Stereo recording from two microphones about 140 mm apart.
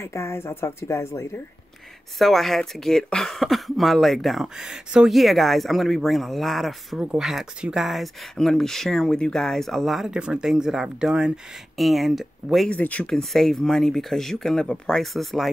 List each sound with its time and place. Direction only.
0.0 s speech: 20° left (ahead or behind)
2.1 s speech: centre (ahead or behind)